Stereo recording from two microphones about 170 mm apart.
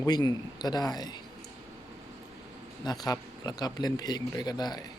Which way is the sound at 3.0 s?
25° left (ahead or behind).